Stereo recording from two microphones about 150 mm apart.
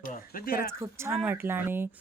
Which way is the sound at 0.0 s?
70° left (ahead or behind).